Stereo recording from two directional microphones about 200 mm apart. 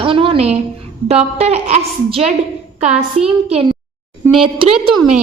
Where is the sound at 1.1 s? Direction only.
30° right (ahead or behind).